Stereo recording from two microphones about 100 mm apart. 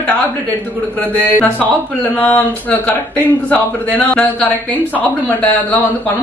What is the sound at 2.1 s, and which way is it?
A man's voice, 15° left (ahead or behind).